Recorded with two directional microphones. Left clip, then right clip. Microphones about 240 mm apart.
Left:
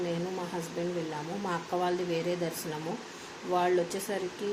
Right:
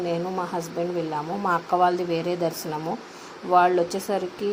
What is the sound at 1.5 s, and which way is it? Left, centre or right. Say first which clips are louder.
Speech: right 10 dB; centre.